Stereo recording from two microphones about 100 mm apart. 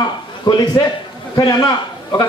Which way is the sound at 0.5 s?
50° left (ahead or behind).